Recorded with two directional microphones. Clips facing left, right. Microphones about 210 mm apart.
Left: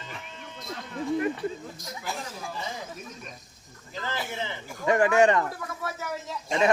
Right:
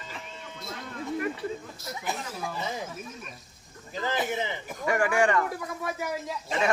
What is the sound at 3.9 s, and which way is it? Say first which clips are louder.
Speech: right 5 dB; 20° right (ahead or behind).